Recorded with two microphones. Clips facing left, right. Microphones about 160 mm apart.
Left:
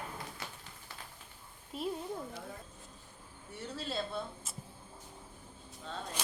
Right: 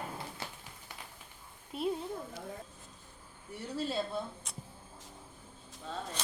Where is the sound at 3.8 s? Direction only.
15° right (ahead or behind).